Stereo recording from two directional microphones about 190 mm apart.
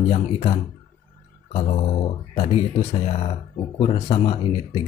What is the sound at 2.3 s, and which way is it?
Speech, 30° left (ahead or behind).